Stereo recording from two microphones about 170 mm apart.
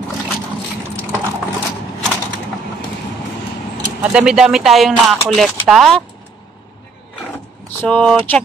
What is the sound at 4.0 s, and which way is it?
Speech, 5° right (ahead or behind).